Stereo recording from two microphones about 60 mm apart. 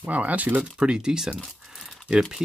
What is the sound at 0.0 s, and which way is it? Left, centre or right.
Speech, right.